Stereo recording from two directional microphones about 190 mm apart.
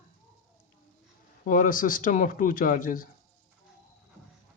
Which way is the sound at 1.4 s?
45° left (ahead or behind).